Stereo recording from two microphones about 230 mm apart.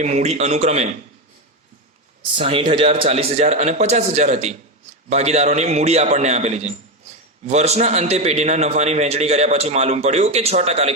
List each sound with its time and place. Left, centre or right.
0.0 s a man's voice: right
2.3 s a man's voice: right